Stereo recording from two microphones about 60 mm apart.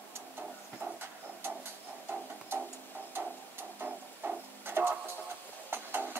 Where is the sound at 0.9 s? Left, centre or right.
Right.